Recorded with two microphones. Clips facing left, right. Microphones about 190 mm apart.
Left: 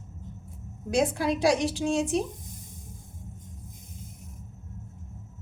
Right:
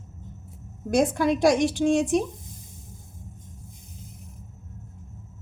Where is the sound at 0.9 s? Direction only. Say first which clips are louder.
Right 4 dB; 50° right (ahead or behind).